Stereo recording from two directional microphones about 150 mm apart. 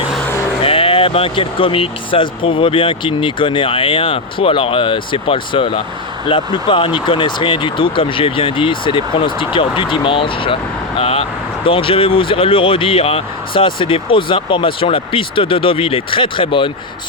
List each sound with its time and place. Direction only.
0.6 s speech: 40° left (ahead or behind)